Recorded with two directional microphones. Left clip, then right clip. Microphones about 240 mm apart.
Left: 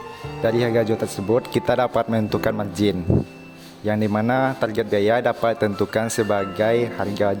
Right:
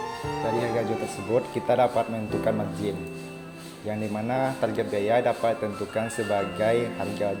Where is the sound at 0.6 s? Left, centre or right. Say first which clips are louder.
Left 7 dB; left.